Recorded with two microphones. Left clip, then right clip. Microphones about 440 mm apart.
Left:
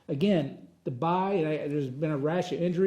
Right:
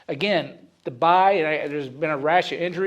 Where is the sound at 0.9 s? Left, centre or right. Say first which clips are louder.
Right 11 dB; right.